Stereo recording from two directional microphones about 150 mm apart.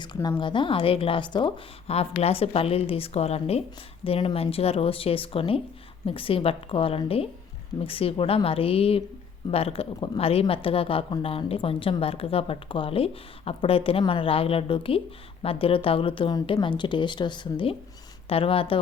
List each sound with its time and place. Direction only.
0.0 s a woman's voice: 30° left (ahead or behind)